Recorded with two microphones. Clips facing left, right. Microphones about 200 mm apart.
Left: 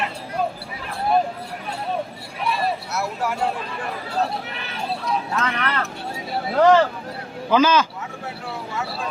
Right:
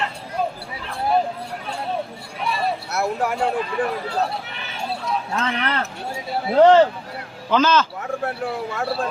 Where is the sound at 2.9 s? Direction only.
55° right (ahead or behind).